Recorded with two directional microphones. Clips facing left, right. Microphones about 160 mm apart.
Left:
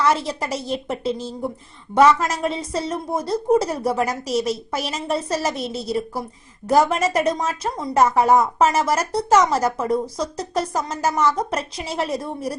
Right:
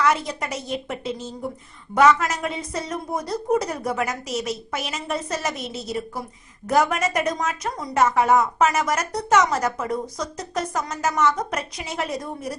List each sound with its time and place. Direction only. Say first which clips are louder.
0.0 s a woman's voice: left 2 dB; 30° left (ahead or behind)